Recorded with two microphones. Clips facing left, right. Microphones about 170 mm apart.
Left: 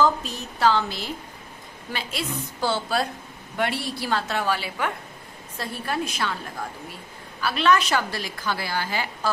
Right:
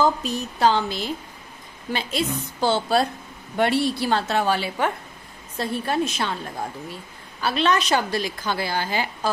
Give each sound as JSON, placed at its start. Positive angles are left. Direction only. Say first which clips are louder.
{"t": 0.0, "sound": "a woman's voice", "louder": "right 1 dB", "side_deg": -15}
{"t": 7.4, "sound": "a woman's voice", "louder": "even", "side_deg": -25}